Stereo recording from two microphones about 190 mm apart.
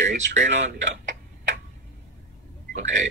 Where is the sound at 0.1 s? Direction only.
35° right (ahead or behind).